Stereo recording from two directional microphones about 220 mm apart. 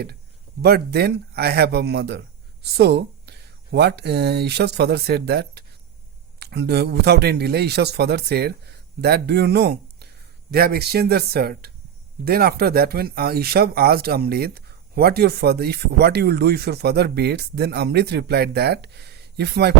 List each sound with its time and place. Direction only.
0.6 s speech: 45° right (ahead or behind)